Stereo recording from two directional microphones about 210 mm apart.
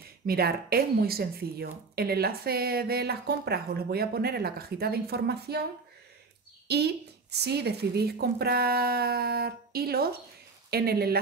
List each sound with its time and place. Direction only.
0.3 s speech: 45° right (ahead or behind)
6.7 s speech: 50° right (ahead or behind)